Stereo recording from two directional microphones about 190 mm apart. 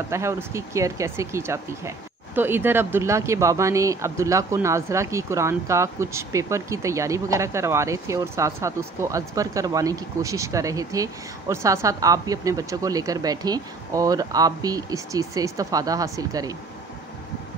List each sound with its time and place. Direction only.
0.1 s speech: 15° right (ahead or behind)